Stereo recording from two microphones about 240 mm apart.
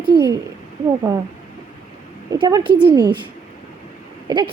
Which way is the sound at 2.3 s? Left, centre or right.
Centre.